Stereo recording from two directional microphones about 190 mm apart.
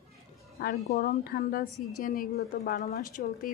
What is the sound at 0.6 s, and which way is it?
A woman's voice, 50° left (ahead or behind).